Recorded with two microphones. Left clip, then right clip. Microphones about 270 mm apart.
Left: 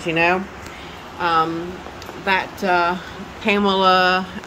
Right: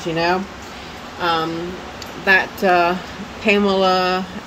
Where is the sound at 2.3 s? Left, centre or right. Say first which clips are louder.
Right 4 dB; centre.